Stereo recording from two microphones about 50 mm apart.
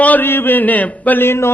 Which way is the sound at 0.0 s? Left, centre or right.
Left.